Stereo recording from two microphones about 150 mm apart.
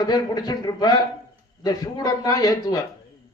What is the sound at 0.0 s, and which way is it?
A man's voice, 25° left (ahead or behind).